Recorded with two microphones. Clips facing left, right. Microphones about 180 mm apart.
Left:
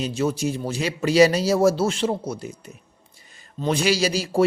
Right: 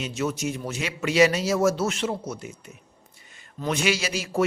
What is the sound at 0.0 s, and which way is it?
A man's voice, 30° left (ahead or behind).